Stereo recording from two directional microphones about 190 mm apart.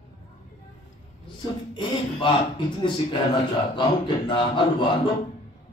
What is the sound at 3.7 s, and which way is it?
Speech, 25° left (ahead or behind).